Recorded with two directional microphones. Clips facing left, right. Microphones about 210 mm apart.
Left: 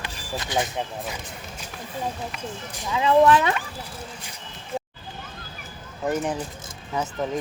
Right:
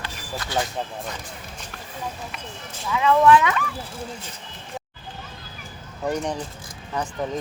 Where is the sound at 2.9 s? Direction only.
30° left (ahead or behind).